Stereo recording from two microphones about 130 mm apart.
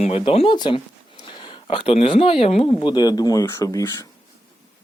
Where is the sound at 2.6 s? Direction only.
35° left (ahead or behind).